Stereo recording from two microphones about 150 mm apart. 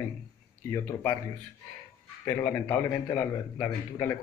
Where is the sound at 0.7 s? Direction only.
15° left (ahead or behind).